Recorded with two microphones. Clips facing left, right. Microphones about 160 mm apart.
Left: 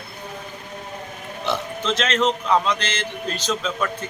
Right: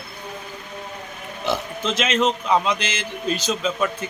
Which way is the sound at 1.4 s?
10° right (ahead or behind).